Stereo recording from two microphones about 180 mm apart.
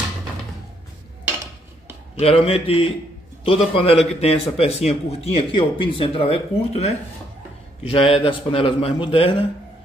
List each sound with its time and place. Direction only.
2.1 s a man's voice: 35° left (ahead or behind)